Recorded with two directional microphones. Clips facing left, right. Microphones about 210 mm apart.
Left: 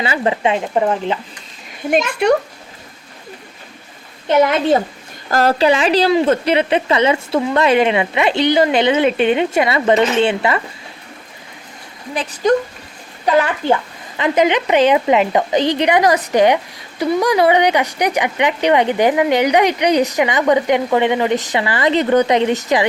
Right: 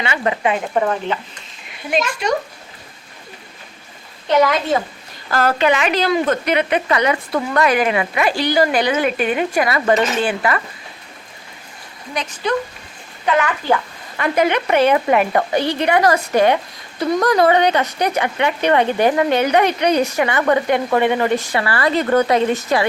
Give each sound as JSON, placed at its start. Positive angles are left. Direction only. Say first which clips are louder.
{"t": 0.0, "sound": "a woman's voice", "louder": "left 2 dB", "side_deg": 30}
{"t": 1.9, "sound": "a child's voice", "louder": "left 5 dB", "side_deg": 60}
{"t": 4.3, "sound": "a woman's voice", "louder": "left 3 dB", "side_deg": 25}
{"t": 12.1, "sound": "a child's voice", "louder": "left 5 dB", "side_deg": 40}
{"t": 14.2, "sound": "speech", "louder": "left 2 dB", "side_deg": 20}